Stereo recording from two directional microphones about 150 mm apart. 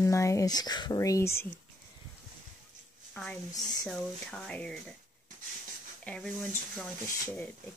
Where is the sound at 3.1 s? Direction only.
5° left (ahead or behind).